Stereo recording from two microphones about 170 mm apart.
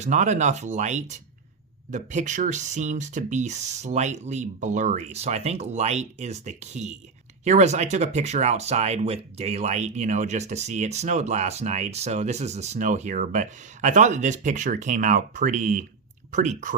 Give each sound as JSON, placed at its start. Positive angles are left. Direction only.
{"t": 0.0, "sound": "speech", "side_deg": -45}